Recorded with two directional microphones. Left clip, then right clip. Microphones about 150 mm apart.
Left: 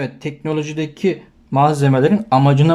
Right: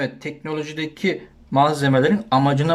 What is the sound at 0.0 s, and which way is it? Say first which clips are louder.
Speech: left 2 dB; 10° left (ahead or behind).